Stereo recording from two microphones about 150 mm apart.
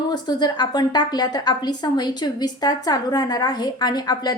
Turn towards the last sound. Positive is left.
turn(degrees=25)  # may be behind; listen again after turning